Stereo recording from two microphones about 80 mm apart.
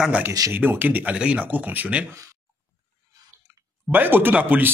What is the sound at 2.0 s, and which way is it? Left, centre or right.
Speech, right.